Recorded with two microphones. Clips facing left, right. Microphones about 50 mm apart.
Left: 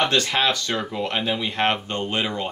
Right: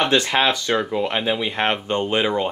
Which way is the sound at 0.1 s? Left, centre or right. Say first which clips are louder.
Right 3 dB; centre.